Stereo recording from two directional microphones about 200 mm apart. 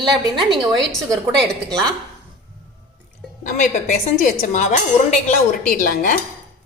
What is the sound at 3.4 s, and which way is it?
A woman's voice, 40° left (ahead or behind).